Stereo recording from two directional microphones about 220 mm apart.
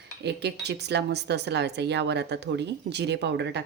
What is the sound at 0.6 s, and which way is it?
Speech, 50° right (ahead or behind).